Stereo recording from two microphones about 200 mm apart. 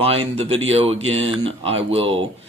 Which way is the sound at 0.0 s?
30° right (ahead or behind).